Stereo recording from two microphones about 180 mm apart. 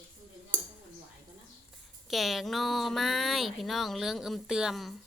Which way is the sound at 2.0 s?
Centre (ahead or behind).